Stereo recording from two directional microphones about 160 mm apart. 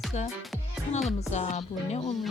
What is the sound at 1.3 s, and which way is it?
Speech, 45° left (ahead or behind).